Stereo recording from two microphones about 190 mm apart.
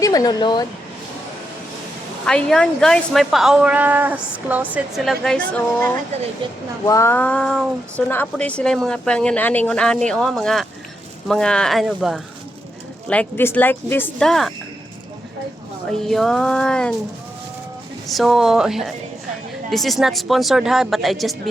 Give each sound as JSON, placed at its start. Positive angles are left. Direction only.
{"t": 0.0, "sound": "speech", "side_deg": 20}
{"t": 2.2, "sound": "speech", "side_deg": 5}
{"t": 6.4, "sound": "speech", "side_deg": -25}
{"t": 6.8, "sound": "speech", "side_deg": 15}
{"t": 13.1, "sound": "speech", "side_deg": 10}
{"t": 15.9, "sound": "speech", "side_deg": 0}
{"t": 18.1, "sound": "speech", "side_deg": 0}